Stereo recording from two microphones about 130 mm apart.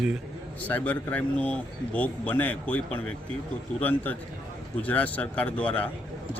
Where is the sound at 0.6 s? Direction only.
10° left (ahead or behind).